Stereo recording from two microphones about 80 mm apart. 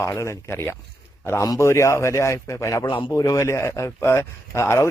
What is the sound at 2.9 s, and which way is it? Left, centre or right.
Speech, left.